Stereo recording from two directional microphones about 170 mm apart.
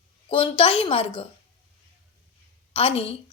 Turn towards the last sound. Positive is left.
turn(degrees=30)  # may be behind; listen again after turning